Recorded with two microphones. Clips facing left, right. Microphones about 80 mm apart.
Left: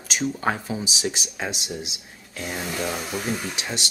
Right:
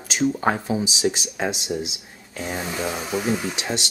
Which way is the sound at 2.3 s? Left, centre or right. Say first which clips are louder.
Right 2 dB; centre.